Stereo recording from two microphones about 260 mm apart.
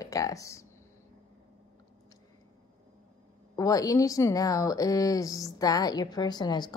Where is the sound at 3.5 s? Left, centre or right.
Centre.